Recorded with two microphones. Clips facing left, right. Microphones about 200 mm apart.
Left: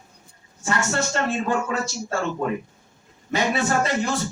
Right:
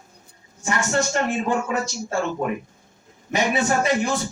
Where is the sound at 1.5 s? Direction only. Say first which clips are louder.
Right 1 dB; 15° right (ahead or behind).